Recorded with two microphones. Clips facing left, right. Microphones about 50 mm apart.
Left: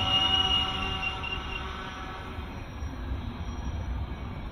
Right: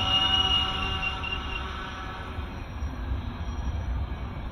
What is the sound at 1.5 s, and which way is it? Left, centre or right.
Music, centre.